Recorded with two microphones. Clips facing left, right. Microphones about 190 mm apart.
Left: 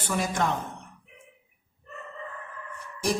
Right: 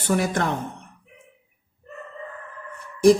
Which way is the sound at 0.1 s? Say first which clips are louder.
Right 5 dB; 55° right (ahead or behind).